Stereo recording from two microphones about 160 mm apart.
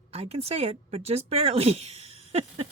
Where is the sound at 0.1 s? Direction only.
40° right (ahead or behind).